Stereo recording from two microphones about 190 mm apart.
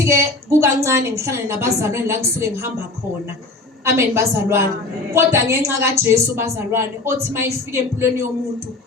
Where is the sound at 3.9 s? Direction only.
15° right (ahead or behind).